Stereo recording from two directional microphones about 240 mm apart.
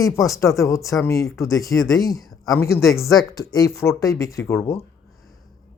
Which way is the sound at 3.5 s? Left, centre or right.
Centre.